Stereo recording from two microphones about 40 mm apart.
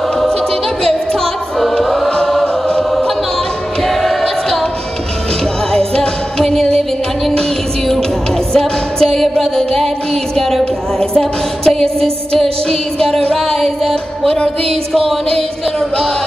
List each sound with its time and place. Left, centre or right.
0.8 s choir: centre
3.8 s choir: centre
5.7 s music: centre
8.5 s music: centre
10.3 s a sound: centre
10.6 s music: centre
14.2 s music: left
14.7 s music: centre